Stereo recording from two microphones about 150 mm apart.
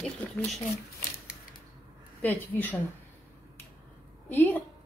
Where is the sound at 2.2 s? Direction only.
15° left (ahead or behind).